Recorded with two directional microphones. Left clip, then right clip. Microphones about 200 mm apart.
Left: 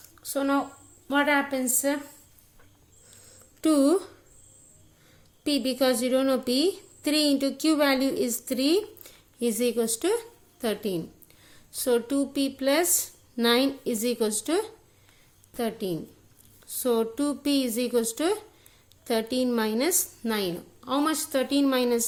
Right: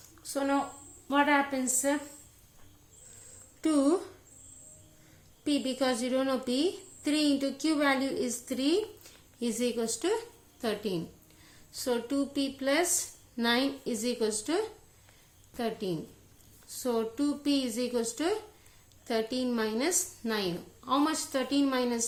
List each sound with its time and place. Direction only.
0.2 s a sound: 45° left (ahead or behind)
1.0 s a woman's voice: 40° left (ahead or behind)
3.6 s a woman's voice: 45° left (ahead or behind)
5.4 s a woman's voice: 45° left (ahead or behind)